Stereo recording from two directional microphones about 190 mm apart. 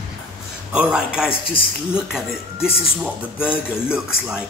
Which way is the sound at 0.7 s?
5° right (ahead or behind).